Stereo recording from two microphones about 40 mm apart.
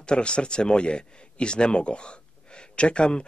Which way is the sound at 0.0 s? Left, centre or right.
Left.